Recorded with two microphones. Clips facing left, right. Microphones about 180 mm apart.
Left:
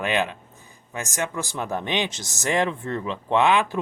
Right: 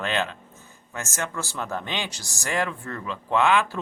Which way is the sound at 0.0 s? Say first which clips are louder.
Left 3 dB; 15° left (ahead or behind).